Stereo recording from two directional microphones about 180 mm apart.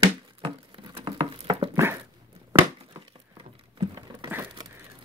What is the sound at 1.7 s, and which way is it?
Dog, 15° right (ahead or behind).